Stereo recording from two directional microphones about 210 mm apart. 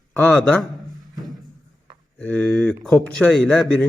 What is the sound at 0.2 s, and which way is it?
Speech, 5° left (ahead or behind).